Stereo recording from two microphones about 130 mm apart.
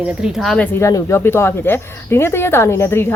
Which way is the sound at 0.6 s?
15° left (ahead or behind).